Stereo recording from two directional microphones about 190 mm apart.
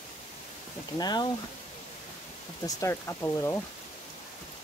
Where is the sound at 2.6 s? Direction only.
15° left (ahead or behind).